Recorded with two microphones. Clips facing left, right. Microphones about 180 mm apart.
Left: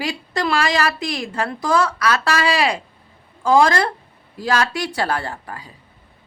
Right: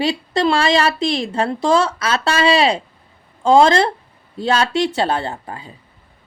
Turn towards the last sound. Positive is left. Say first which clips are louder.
# right 3 dB
turn(degrees=-25)  # may be behind; listen again after turning